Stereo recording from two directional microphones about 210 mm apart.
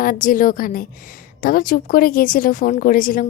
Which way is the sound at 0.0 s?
40° left (ahead or behind).